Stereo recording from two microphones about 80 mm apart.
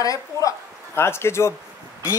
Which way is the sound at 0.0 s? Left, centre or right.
Left.